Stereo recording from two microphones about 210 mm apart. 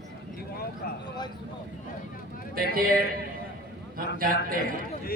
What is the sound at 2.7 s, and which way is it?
A man's voice, 45° right (ahead or behind).